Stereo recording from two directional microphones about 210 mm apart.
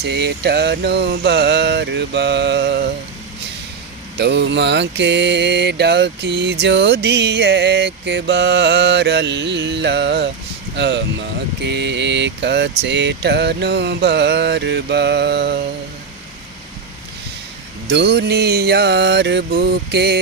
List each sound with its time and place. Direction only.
0.0 s mantra: 55° right (ahead or behind)
4.2 s mantra: 55° right (ahead or behind)
17.8 s mantra: 55° right (ahead or behind)